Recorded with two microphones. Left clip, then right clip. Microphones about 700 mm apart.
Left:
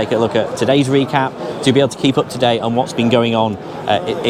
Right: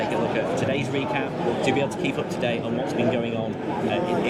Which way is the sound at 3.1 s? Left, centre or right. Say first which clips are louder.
Left 11 dB; left.